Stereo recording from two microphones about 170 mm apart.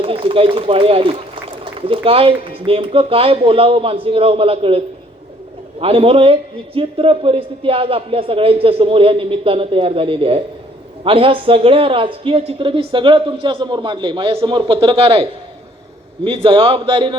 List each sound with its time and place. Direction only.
0.0 s a man's voice: 35° right (ahead or behind)
1.6 s a sound: 35° right (ahead or behind)
2.0 s a man's voice: 35° right (ahead or behind)
5.8 s a man's voice: 35° right (ahead or behind)